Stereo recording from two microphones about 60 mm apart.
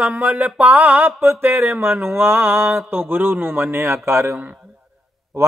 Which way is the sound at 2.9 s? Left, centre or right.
Right.